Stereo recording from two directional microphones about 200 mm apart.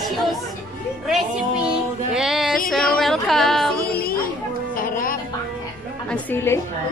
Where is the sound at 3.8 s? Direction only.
45° left (ahead or behind).